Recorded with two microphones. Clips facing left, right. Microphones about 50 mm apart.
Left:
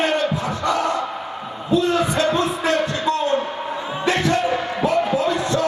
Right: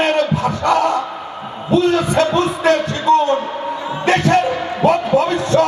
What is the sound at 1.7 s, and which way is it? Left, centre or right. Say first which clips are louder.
Heart sounds: right 4 dB; right.